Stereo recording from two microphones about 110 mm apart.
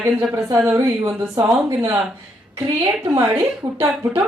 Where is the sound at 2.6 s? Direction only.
25° right (ahead or behind).